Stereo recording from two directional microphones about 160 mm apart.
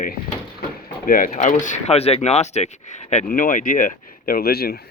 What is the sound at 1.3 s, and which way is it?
Speech, 50° left (ahead or behind).